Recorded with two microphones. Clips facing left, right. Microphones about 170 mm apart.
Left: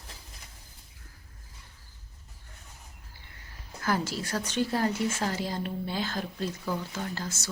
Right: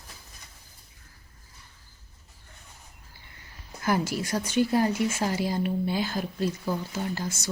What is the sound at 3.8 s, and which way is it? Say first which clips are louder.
Speech: right 3 dB; 15° right (ahead or behind).